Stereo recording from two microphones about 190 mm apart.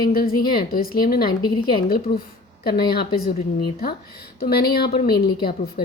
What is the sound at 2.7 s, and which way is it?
A woman's voice, 55° left (ahead or behind).